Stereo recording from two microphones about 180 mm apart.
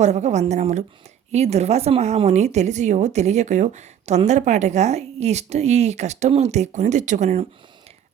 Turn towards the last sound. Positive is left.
turn(degrees=-45)  # may be behind; listen again after turning